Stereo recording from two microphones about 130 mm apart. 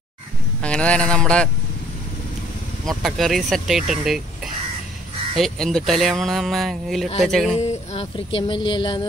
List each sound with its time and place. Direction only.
0.6 s speech: 10° left (ahead or behind)
2.9 s speech: centre (ahead or behind)
5.3 s speech: centre (ahead or behind)
7.6 s speech: 55° left (ahead or behind); by 9.0 s 40° left (ahead or behind)